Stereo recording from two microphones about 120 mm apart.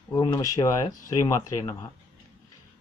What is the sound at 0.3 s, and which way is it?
Speech, 25° left (ahead or behind).